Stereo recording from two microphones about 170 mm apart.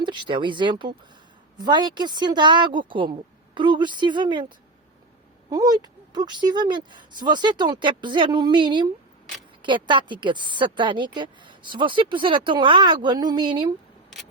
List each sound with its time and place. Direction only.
0.0 s a woman's voice: 30° right (ahead or behind)